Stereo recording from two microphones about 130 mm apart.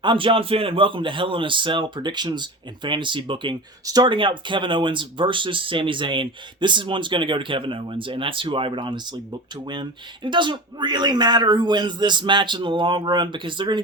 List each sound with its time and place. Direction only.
0.0 s speech: 40° right (ahead or behind)
10.2 s speech: 35° right (ahead or behind)